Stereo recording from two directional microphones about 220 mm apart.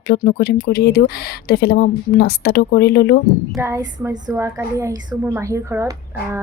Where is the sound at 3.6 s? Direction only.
10° right (ahead or behind).